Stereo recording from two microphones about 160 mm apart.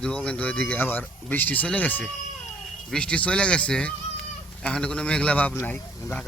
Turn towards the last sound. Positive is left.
turn(degrees=10)  # may be behind; listen again after turning